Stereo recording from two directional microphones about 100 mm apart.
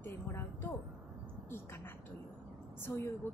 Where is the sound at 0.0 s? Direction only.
25° left (ahead or behind).